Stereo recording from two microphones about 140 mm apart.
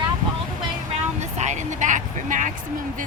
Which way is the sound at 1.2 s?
55° right (ahead or behind).